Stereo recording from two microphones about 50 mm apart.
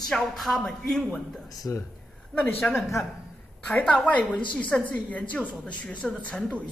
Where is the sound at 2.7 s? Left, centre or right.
Left.